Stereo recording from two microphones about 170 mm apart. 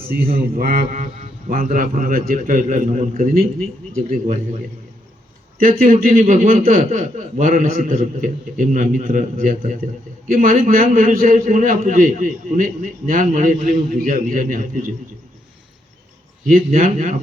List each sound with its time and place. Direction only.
0.0 s a man's voice: 60° right (ahead or behind)
16.5 s a man's voice: 50° right (ahead or behind)